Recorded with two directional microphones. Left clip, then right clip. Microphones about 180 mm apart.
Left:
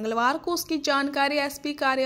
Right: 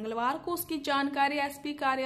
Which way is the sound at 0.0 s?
35° left (ahead or behind).